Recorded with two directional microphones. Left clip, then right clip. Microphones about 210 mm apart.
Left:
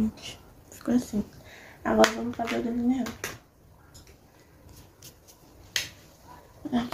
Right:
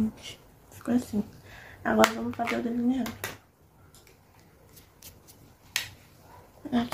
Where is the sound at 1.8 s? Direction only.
15° right (ahead or behind).